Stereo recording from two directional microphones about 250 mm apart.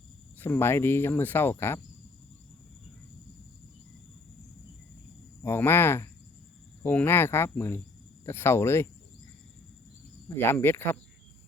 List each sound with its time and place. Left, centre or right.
0.3 s speech: centre
5.4 s speech: centre
10.2 s speech: centre